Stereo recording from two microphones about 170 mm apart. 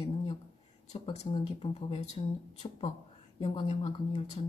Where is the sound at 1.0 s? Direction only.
35° left (ahead or behind).